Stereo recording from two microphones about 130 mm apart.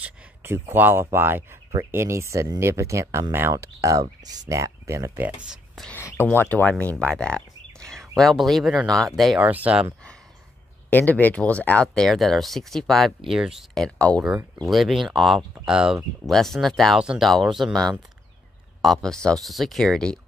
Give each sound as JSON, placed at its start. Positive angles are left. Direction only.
{"t": 0.0, "sound": "speech", "side_deg": -20}
{"t": 5.9, "sound": "a sound", "side_deg": 20}
{"t": 6.2, "sound": "speech", "side_deg": 15}
{"t": 9.4, "sound": "speech", "side_deg": -10}
{"t": 10.9, "sound": "speech", "side_deg": 15}